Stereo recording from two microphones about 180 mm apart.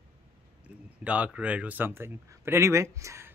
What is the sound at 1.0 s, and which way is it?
Speech, 5° right (ahead or behind).